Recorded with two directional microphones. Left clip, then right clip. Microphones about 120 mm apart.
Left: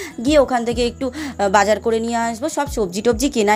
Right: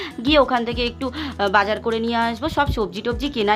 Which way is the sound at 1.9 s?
30° left (ahead or behind).